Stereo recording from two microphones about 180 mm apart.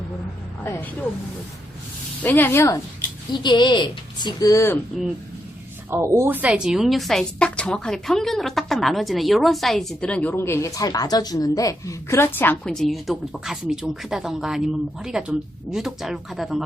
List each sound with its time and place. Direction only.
0.6 s speech: 15° left (ahead or behind)
2.2 s speech: 10° left (ahead or behind)
5.9 s a woman's voice: 15° right (ahead or behind)